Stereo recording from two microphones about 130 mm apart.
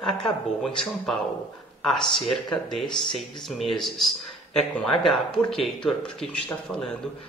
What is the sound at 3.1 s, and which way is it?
Speech, centre (ahead or behind).